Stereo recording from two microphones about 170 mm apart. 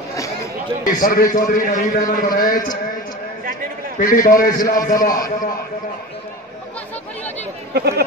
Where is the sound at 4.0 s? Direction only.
55° left (ahead or behind).